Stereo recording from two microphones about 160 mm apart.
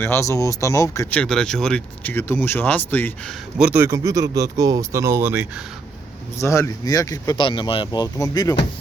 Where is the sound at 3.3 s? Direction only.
5° right (ahead or behind).